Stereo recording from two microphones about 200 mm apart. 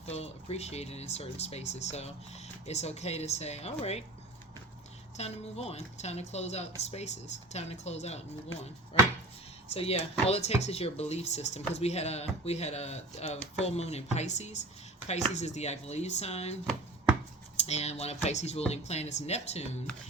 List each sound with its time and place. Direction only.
0.0 s speech: 30° left (ahead or behind)
5.1 s speech: 30° left (ahead or behind)
9.6 s speech: 30° left (ahead or behind)
17.6 s speech: 35° left (ahead or behind)